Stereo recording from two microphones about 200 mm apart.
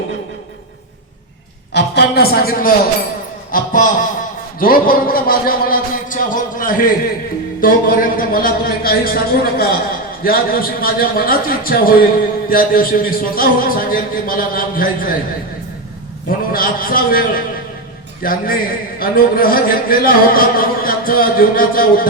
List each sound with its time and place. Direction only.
1.7 s a man's voice: 55° left (ahead or behind)
16.5 s a man's voice: 45° left (ahead or behind)